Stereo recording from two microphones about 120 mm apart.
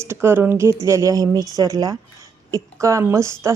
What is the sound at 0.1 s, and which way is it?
A woman's voice, 20° right (ahead or behind).